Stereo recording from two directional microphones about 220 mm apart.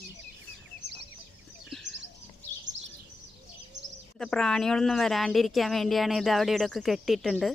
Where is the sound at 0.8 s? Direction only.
50° right (ahead or behind).